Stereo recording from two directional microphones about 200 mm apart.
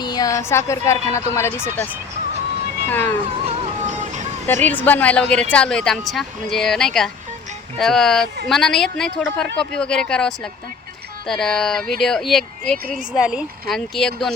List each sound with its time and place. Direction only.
0.0 s speech: 20° left (ahead or behind)
2.9 s speech: 10° left (ahead or behind)
3.2 s music: 30° right (ahead or behind)
4.4 s speech: 10° left (ahead or behind)